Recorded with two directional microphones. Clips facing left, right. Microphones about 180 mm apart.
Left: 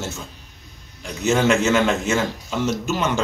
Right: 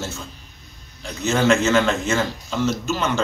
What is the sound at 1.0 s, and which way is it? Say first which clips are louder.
A man's voice: left 1 dB; 10° left (ahead or behind).